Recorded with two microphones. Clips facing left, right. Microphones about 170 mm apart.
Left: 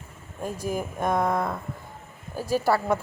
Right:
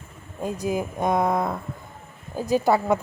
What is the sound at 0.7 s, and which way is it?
A woman's voice, 15° right (ahead or behind).